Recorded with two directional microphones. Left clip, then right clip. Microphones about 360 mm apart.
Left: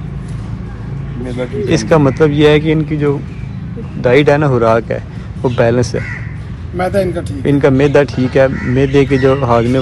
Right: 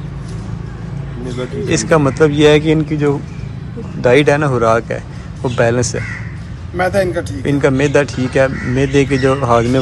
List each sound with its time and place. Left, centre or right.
1.7 s speech: centre